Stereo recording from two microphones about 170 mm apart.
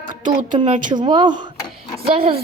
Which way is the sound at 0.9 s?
25° right (ahead or behind).